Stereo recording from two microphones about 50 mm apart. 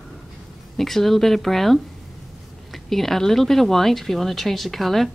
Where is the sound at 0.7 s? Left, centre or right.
Centre.